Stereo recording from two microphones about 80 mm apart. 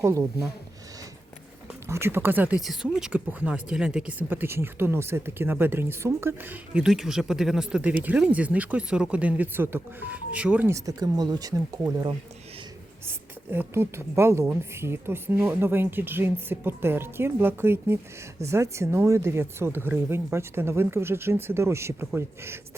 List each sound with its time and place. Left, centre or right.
0.0 s a woman's voice: right
1.9 s speech: right
2.6 s speech: centre
3.1 s speech: centre
4.2 s speech: right
6.8 s speech: centre
7.8 s speech: centre
9.6 s speech: right
10.7 s speech: right
13.5 s a woman's voice: right